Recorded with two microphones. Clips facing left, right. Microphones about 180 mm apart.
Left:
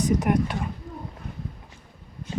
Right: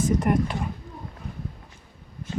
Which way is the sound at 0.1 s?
Centre (ahead or behind).